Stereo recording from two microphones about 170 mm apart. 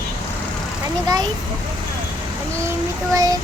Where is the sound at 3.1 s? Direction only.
20° right (ahead or behind).